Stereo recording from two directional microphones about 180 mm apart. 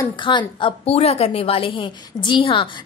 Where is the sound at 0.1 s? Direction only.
25° left (ahead or behind).